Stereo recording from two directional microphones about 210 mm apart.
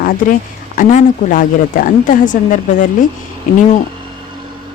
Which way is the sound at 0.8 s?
40° left (ahead or behind).